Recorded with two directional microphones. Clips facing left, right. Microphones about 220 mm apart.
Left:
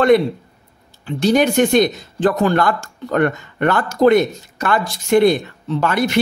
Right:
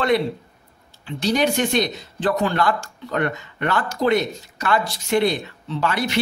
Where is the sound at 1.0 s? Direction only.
50° left (ahead or behind).